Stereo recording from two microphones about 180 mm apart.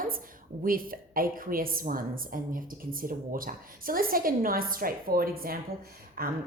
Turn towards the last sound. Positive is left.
turn(degrees=-55)  # may be behind; listen again after turning